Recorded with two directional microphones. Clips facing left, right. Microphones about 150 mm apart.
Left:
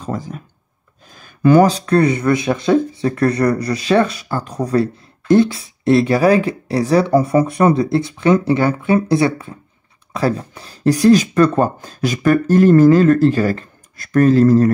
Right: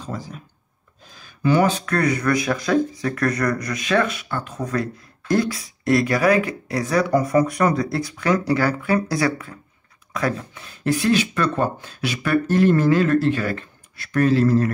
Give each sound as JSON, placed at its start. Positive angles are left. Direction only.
{"t": 0.0, "sound": "speech", "side_deg": 50}